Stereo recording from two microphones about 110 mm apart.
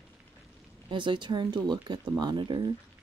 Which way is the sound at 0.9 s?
45° right (ahead or behind).